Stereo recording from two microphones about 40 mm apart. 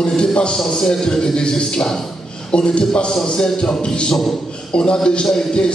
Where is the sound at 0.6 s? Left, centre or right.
Centre.